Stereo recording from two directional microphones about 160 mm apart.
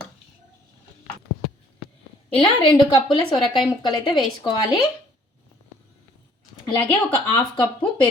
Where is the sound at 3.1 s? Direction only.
Centre (ahead or behind).